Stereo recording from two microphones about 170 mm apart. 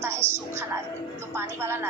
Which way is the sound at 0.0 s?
15° right (ahead or behind).